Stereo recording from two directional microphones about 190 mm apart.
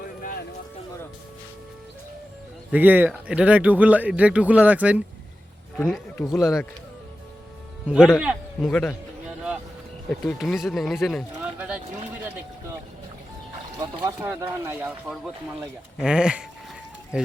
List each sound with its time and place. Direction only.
0.2 s a sound: 50° left (ahead or behind)
2.7 s speech: 10° right (ahead or behind)
5.7 s speech: 5° left (ahead or behind)
7.9 s a man's voice: 5° right (ahead or behind)
8.7 s speech: 5° left (ahead or behind)
10.1 s speech: 5° left (ahead or behind)
14.0 s speech: 20° right (ahead or behind)